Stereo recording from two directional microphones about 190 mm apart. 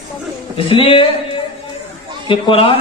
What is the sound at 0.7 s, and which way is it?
Speech, 30° left (ahead or behind).